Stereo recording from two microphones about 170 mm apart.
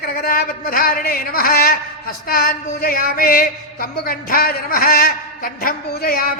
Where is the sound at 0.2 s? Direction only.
60° left (ahead or behind).